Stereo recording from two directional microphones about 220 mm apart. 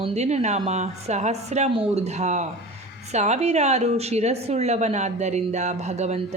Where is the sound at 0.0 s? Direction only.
30° right (ahead or behind).